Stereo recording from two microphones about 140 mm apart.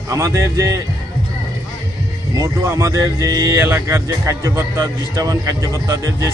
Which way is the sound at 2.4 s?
20° right (ahead or behind).